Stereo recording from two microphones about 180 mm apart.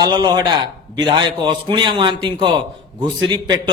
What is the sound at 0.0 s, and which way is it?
A man's voice, 25° right (ahead or behind).